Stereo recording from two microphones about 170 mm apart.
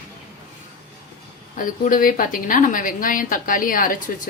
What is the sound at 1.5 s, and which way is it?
A woman's voice, 55° left (ahead or behind).